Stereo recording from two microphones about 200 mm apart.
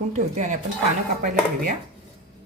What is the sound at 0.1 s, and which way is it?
Speech, 40° right (ahead or behind).